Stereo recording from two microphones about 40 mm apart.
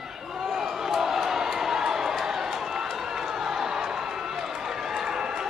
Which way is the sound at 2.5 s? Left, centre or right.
Centre.